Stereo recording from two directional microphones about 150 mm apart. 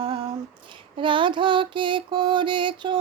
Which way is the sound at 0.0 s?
30° right (ahead or behind).